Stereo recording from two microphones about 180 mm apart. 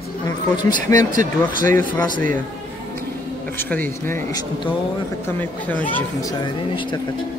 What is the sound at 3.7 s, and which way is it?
Speech, 10° left (ahead or behind).